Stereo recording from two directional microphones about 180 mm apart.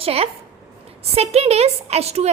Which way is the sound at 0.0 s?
35° right (ahead or behind).